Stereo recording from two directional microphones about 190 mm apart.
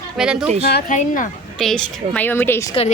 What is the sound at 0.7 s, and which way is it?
Speech, 60° left (ahead or behind).